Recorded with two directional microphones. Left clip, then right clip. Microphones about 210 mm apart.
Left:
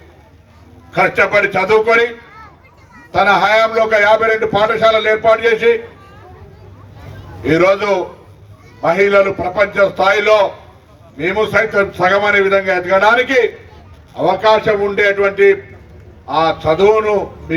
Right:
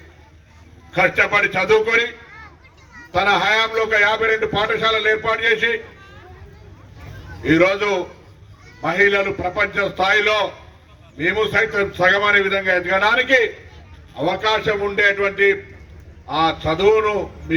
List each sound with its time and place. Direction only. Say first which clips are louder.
0.9 s a man's voice: left 4 dB; 55° left (ahead or behind)
3.2 s a man's voice: left 6 dB; 55° left (ahead or behind)
7.4 s a man's voice: left 4 dB; 55° left (ahead or behind)